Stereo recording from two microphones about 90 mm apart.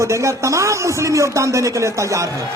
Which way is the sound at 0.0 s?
35° right (ahead or behind).